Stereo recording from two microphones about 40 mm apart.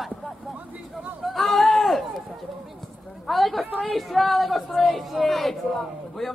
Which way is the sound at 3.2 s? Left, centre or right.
Centre.